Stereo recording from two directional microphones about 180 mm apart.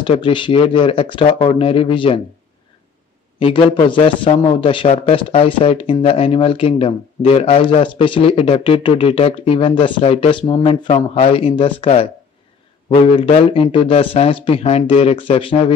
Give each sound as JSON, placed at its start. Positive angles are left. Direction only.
{"t": 0.0, "sound": "speech", "side_deg": 30}
{"t": 3.3, "sound": "speech", "side_deg": 30}